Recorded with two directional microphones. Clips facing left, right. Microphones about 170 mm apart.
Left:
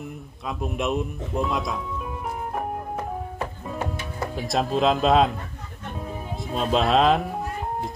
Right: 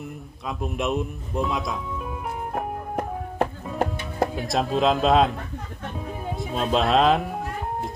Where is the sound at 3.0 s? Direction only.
60° right (ahead or behind).